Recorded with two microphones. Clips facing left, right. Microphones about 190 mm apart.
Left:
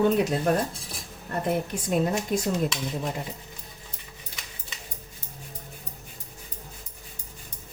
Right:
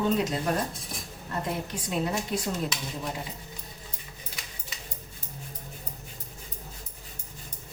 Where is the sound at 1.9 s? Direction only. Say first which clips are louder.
Left 4 dB; 45° left (ahead or behind).